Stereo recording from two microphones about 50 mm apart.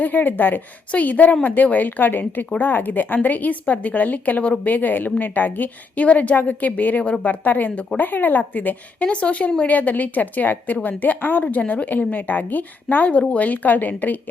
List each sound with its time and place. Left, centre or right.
0.0 s a woman's voice: left
9.6 s a woman's voice: left